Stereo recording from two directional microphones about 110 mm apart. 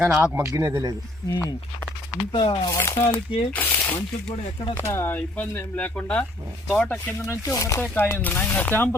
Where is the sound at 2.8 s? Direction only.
20° left (ahead or behind).